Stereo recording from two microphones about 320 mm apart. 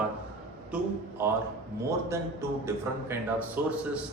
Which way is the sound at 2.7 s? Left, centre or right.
Centre.